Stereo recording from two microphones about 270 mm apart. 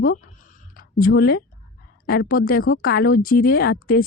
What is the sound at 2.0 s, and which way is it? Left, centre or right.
Speech, left.